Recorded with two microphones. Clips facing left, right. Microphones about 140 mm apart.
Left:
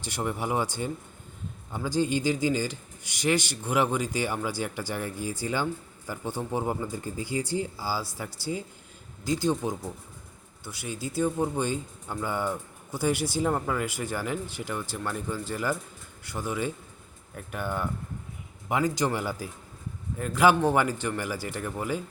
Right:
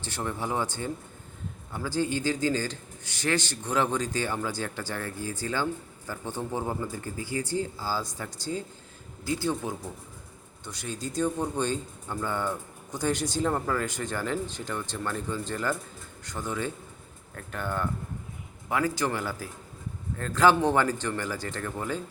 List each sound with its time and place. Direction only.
0.0 s speech: 15° left (ahead or behind)
10.7 s speech: 5° left (ahead or behind)